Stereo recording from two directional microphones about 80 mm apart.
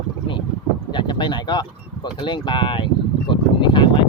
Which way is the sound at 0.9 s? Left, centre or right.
Left.